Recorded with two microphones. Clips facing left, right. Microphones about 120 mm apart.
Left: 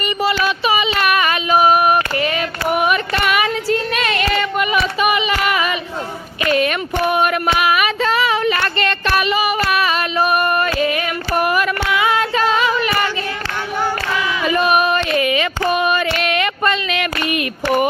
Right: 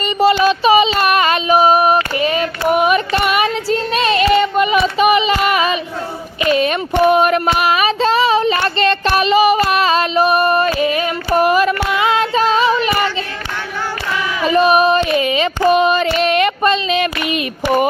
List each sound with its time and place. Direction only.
0.3 s female singing: 30° right (ahead or behind)
5.0 s a sound: 25° right (ahead or behind)
7.2 s child singing: 35° right (ahead or behind)
9.6 s female singing: 30° right (ahead or behind)
14.4 s female singing: 30° right (ahead or behind)
16.1 s a sound: 30° right (ahead or behind)